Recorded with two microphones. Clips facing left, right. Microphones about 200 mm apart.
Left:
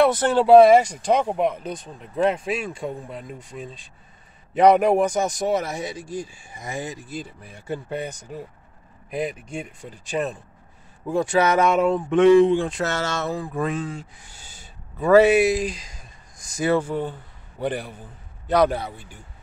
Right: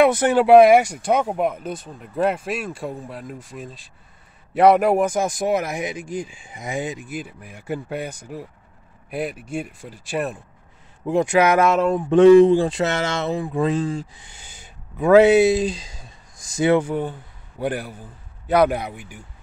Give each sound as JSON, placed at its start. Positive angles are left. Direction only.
{"t": 0.0, "sound": "speech", "side_deg": -10}
{"t": 12.4, "sound": "speech", "side_deg": -35}
{"t": 12.8, "sound": "speech", "side_deg": -15}
{"t": 14.2, "sound": "speech", "side_deg": -20}